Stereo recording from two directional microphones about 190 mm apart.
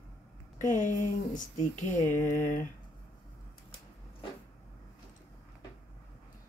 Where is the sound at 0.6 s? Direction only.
40° left (ahead or behind).